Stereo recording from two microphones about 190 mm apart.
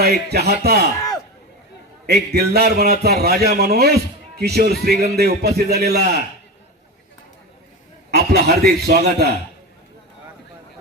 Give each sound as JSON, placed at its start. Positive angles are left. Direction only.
{"t": 0.0, "sound": "a man's voice", "side_deg": -55}
{"t": 2.3, "sound": "a man's voice", "side_deg": -55}
{"t": 8.1, "sound": "a man's voice", "side_deg": -55}